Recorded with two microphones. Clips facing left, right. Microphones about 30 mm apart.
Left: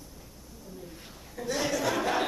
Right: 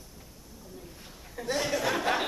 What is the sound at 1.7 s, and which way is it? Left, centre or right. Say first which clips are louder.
Speech: even; centre.